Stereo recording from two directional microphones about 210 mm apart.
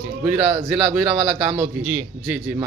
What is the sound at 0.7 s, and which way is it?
Speech, centre (ahead or behind).